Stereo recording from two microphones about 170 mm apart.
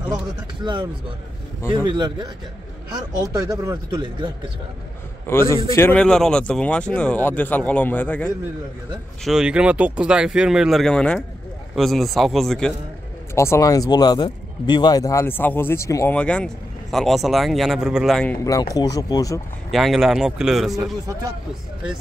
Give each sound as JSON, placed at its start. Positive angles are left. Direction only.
{"t": 0.6, "sound": "speech", "side_deg": -25}
{"t": 3.3, "sound": "speech", "side_deg": -20}
{"t": 5.2, "sound": "speech", "side_deg": 15}
{"t": 9.2, "sound": "speech", "side_deg": -5}
{"t": 13.3, "sound": "speech", "side_deg": 15}
{"t": 18.4, "sound": "speech", "side_deg": 20}
{"t": 19.7, "sound": "speech", "side_deg": 0}